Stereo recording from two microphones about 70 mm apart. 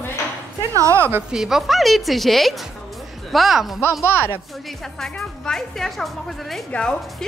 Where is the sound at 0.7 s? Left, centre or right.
Right.